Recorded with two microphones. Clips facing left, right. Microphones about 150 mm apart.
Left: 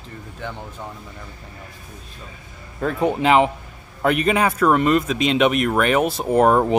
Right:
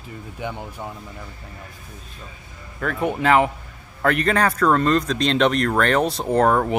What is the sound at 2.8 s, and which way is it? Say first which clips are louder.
Speech: left 3 dB; 25° left (ahead or behind).